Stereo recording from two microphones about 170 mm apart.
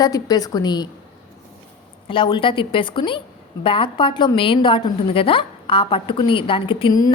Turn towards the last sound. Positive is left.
turn(degrees=30)  # may be behind; listen again after turning